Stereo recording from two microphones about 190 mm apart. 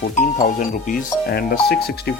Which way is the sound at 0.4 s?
40° left (ahead or behind).